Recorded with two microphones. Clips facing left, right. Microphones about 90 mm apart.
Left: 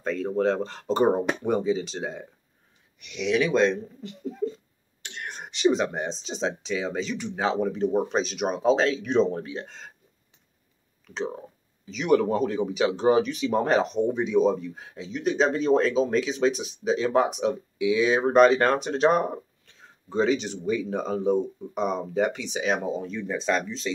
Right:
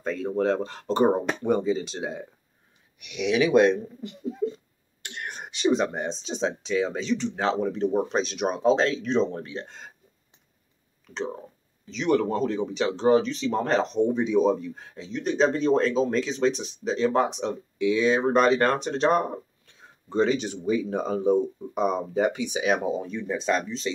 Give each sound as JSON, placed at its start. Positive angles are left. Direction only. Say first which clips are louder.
{"t": 0.0, "sound": "speech", "louder": "left 1 dB", "side_deg": -5}
{"t": 11.9, "sound": "speech", "louder": "left 1 dB", "side_deg": 10}
{"t": 13.9, "sound": "speech", "louder": "right 1 dB", "side_deg": 0}